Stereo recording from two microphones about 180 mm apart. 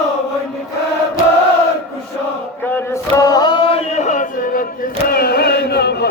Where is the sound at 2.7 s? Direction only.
20° left (ahead or behind).